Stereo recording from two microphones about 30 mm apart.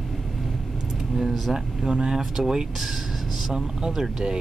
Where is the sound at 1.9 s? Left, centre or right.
Right.